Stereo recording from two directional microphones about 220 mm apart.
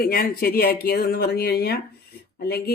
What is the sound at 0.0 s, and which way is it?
Speech, 45° left (ahead or behind).